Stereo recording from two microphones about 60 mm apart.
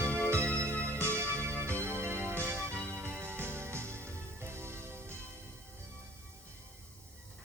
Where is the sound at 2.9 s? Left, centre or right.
Right.